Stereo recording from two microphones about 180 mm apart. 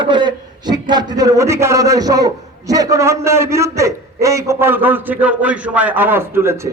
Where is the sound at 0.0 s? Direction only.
25° right (ahead or behind).